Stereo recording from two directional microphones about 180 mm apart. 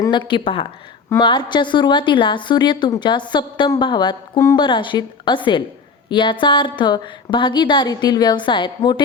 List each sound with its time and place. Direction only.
0.0 s a woman's voice: 25° left (ahead or behind)